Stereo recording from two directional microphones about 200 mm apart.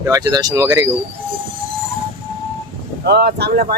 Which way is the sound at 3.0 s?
55° right (ahead or behind).